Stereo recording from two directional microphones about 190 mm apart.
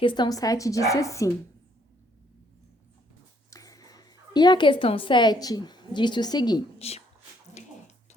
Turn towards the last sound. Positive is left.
turn(degrees=35)  # may be behind; listen again after turning